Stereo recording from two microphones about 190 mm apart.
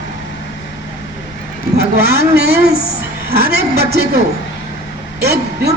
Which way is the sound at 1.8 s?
60° right (ahead or behind).